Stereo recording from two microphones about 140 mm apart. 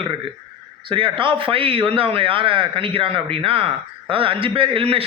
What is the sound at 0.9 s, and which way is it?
A man's voice, 35° right (ahead or behind).